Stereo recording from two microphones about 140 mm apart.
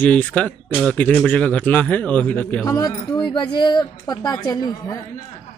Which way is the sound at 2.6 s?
25° left (ahead or behind).